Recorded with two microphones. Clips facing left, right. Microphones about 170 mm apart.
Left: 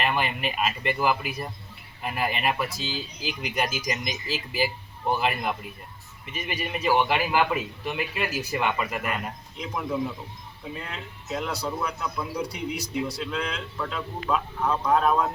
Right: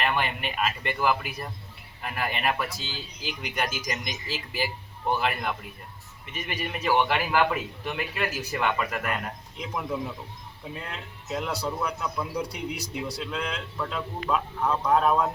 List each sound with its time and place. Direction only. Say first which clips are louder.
0.0 s a man's voice: left 1 dB; 15° left (ahead or behind)
9.6 s a man's voice: left 3 dB; centre (ahead or behind)